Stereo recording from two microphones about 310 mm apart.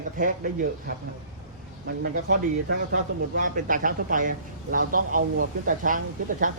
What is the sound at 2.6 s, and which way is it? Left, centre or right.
Speech, right.